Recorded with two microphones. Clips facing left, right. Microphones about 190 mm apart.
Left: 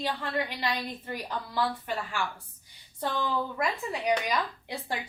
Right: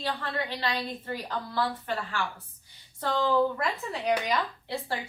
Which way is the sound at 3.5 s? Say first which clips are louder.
Left 1 dB; 10° left (ahead or behind).